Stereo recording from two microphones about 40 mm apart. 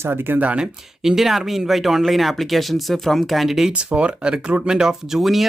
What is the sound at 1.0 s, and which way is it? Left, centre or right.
Speech, centre.